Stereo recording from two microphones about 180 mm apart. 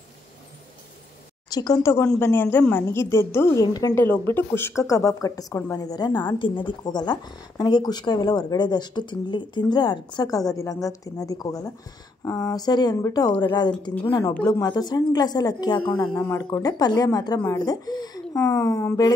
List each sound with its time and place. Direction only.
1.5 s a woman's voice: 20° left (ahead or behind)